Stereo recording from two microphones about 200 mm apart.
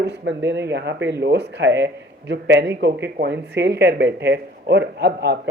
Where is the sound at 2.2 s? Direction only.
60° right (ahead or behind).